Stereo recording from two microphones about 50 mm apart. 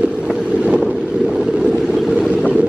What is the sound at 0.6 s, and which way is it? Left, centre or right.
Vehicle, right.